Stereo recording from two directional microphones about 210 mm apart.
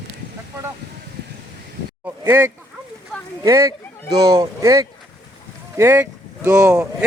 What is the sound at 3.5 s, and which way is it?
Speech, 15° right (ahead or behind).